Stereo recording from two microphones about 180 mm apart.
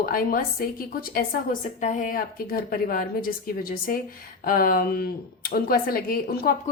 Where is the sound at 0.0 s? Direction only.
55° left (ahead or behind).